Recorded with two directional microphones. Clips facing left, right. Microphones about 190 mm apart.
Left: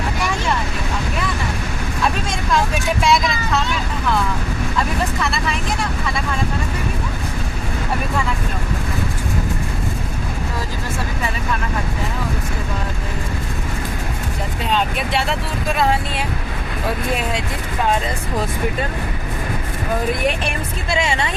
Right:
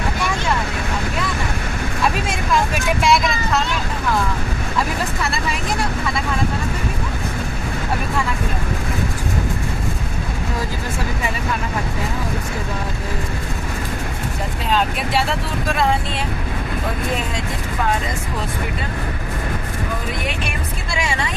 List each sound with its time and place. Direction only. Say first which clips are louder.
3.0 s vehicle: even; centre (ahead or behind)
14.7 s vehicle: right 1 dB; centre (ahead or behind)
20.9 s music: left 4 dB; 25° left (ahead or behind)